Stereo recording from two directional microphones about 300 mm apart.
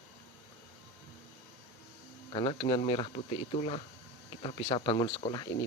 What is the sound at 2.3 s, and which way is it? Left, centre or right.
Speech, centre.